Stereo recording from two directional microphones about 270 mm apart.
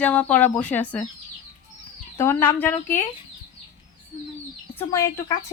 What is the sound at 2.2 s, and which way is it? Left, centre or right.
Speech, centre.